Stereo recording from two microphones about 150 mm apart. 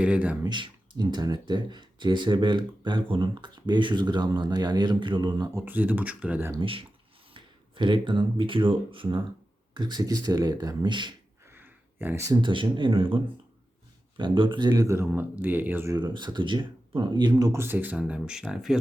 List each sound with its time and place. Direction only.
0.0 s speech: 10° right (ahead or behind)
0.4 s speech: 30° right (ahead or behind)
5.5 s speech: 10° right (ahead or behind)
6.6 s speech: 35° right (ahead or behind)
11.5 s a sound: 15° right (ahead or behind)
12.4 s speech: 30° right (ahead or behind)
14.7 s speech: 20° right (ahead or behind)
16.0 s speech: 30° right (ahead or behind)
17.4 s speech: 15° right (ahead or behind)